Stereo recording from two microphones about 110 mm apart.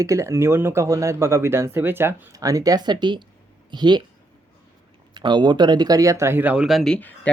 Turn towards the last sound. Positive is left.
turn(degrees=15)  # may be behind; listen again after turning